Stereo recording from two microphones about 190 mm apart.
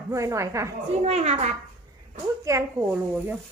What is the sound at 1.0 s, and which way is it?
Speech, 35° right (ahead or behind).